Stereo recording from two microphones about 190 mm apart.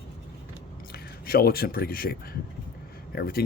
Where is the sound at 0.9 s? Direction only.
55° left (ahead or behind).